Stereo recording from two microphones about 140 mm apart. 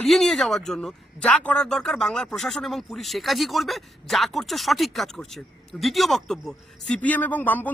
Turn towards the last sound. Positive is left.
turn(degrees=15)  # may be behind; listen again after turning